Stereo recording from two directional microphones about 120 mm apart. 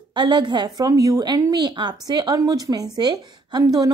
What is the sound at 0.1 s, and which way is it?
A woman's voice, 40° right (ahead or behind).